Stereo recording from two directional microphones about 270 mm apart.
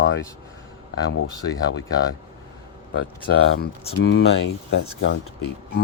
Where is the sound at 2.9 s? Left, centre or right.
Left.